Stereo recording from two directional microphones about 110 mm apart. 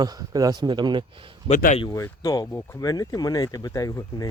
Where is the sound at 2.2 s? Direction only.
35° left (ahead or behind).